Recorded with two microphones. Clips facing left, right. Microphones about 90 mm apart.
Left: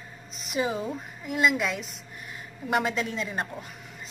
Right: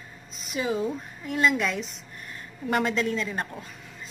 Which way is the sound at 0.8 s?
10° left (ahead or behind).